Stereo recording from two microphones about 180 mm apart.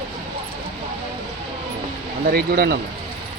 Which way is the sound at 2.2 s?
55° right (ahead or behind).